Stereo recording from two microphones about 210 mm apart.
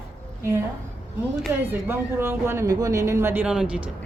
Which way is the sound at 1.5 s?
10° right (ahead or behind).